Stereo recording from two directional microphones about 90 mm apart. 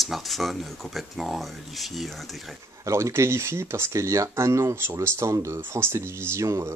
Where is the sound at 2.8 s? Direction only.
35° right (ahead or behind).